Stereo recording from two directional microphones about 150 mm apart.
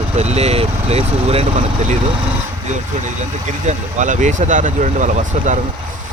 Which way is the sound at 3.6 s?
55° right (ahead or behind).